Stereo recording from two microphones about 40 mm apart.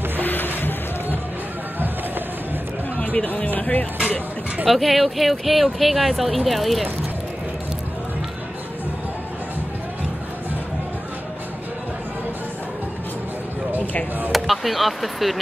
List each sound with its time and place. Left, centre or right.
0.2 s music: left
3.0 s music: left
4.6 s speech: centre
14.3 s speech: centre